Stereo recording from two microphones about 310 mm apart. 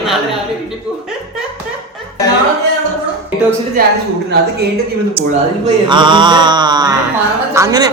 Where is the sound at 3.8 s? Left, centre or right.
Right.